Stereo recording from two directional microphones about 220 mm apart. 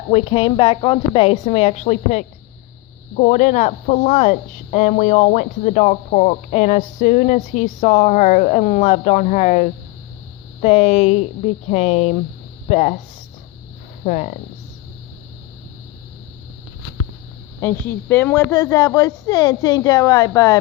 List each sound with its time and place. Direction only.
0.1 s a woman's voice: 25° left (ahead or behind)
14.0 s speech: 35° left (ahead or behind)
17.6 s speech: 10° left (ahead or behind)